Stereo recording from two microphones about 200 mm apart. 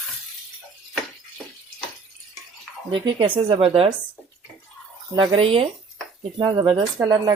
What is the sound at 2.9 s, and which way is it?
Speech, 25° right (ahead or behind).